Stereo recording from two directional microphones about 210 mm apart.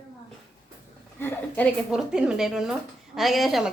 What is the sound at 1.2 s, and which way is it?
Speech, 10° left (ahead or behind).